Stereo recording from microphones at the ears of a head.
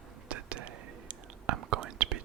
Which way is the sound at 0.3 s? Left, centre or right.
Right.